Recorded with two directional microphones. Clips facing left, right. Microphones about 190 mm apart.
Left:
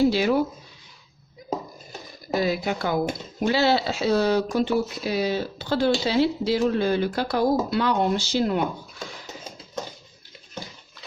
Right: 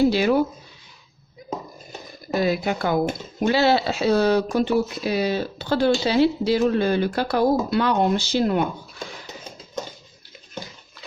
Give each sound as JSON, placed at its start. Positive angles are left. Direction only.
{"t": 0.1, "sound": "speech", "side_deg": -60}
{"t": 2.3, "sound": "speech", "side_deg": -55}